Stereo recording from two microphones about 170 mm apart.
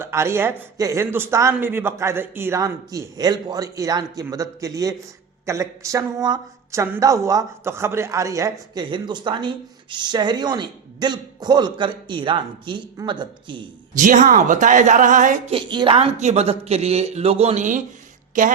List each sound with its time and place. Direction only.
0.0 s a man's voice: 15° right (ahead or behind)
13.9 s a woman's voice: 50° right (ahead or behind)
15.5 s a woman's voice: 30° right (ahead or behind); by 18.5 s 50° right (ahead or behind)